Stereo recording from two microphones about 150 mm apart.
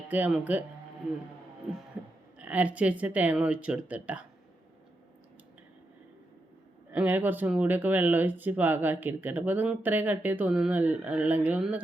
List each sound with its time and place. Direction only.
0.1 s speech: 10° right (ahead or behind)
2.4 s speech: 10° right (ahead or behind)
6.9 s speech: 10° right (ahead or behind)